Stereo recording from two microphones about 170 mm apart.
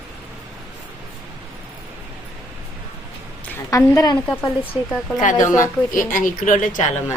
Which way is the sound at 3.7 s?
20° left (ahead or behind).